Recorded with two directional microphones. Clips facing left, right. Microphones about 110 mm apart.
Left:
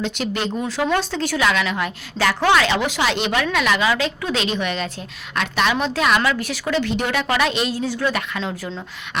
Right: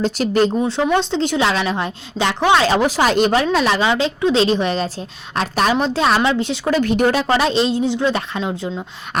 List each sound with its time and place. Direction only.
0.0 s a woman's voice: 40° right (ahead or behind)
0.6 s speech: 25° right (ahead or behind)
2.6 s a woman's voice: 40° right (ahead or behind)
6.7 s speech: 45° right (ahead or behind)
7.1 s speech: 35° right (ahead or behind)